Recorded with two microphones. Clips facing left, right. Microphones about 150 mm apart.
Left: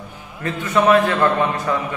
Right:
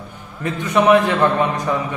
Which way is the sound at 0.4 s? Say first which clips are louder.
Right 1 dB; 15° right (ahead or behind).